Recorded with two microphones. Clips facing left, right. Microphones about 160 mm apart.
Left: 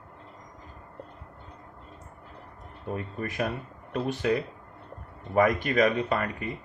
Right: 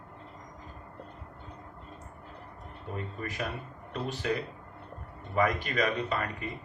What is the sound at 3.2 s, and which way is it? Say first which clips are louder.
Speech: left 6 dB; 50° left (ahead or behind).